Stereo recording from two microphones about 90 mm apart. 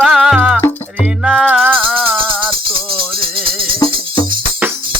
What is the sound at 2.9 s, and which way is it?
Music, 75° right (ahead or behind).